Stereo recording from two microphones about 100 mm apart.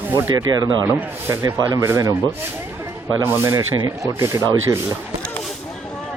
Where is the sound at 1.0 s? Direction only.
20° right (ahead or behind).